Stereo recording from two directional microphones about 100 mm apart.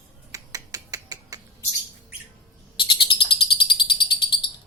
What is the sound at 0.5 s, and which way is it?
Finger snapping, 40° right (ahead or behind).